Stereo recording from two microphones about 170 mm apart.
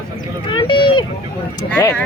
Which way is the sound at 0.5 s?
25° left (ahead or behind).